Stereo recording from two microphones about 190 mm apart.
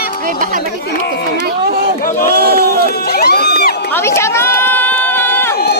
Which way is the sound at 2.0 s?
45° left (ahead or behind).